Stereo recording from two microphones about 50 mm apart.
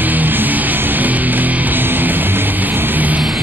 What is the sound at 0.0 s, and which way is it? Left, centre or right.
Music, right.